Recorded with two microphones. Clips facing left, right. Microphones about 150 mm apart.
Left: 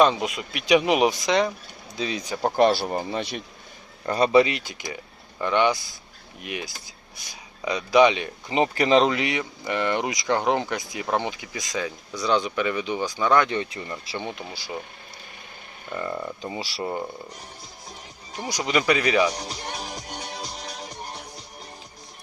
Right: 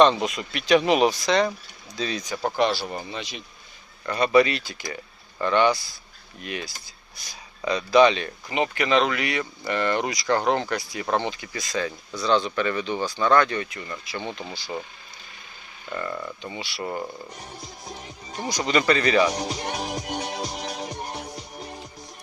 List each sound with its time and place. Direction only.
0.0 s speech: 5° left (ahead or behind)
2.6 s speech: 45° left (ahead or behind)
3.2 s speech: 55° left (ahead or behind)
4.0 s speech: 30° left (ahead or behind); by 8.5 s 15° left (ahead or behind)
8.5 s speech: 35° left (ahead or behind)
14.2 s speech: 10° left (ahead or behind)
15.9 s speech: 20° left (ahead or behind)
16.4 s speech: 35° left (ahead or behind)
16.8 s speech: 15° left (ahead or behind)
18.4 s speech: 10° left (ahead or behind)
20.1 s music: 60° right (ahead or behind)